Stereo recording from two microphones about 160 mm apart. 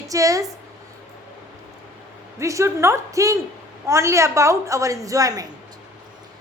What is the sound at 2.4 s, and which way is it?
A woman's voice, 20° right (ahead or behind).